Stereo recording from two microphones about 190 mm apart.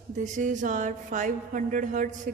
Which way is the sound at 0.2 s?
40° right (ahead or behind).